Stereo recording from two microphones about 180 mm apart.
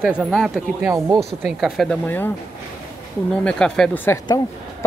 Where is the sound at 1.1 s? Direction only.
Centre (ahead or behind).